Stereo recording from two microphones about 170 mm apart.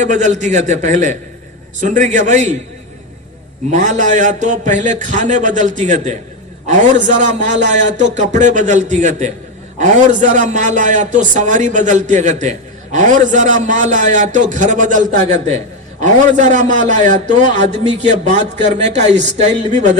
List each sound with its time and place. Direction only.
0.0 s a man's voice: 45° right (ahead or behind)
3.7 s a man's voice: 45° right (ahead or behind)